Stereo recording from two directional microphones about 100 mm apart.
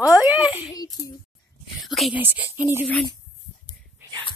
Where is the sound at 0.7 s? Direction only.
35° left (ahead or behind).